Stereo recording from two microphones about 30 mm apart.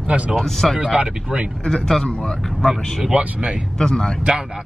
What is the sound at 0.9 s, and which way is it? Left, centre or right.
Speech, right.